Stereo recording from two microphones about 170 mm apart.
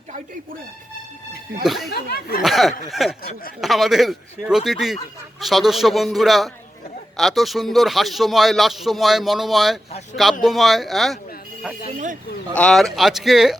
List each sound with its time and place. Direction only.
1.6 s speech: centre (ahead or behind)
1.9 s speech: 65° left (ahead or behind)
2.4 s speech: centre (ahead or behind)
11.9 s speech: 45° right (ahead or behind)
12.5 s speech: 5° left (ahead or behind)